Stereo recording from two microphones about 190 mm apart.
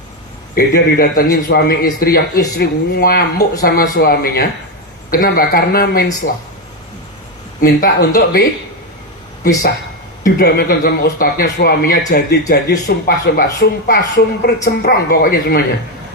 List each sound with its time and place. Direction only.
0.5 s speech: 50° left (ahead or behind)
7.6 s speech: 50° left (ahead or behind)
10.2 s speech: 55° left (ahead or behind)